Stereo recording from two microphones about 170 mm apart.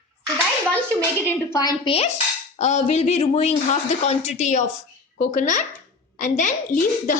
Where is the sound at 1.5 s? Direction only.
20° left (ahead or behind).